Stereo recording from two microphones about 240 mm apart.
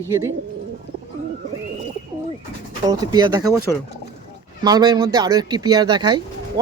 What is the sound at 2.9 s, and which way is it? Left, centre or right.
Speech, centre.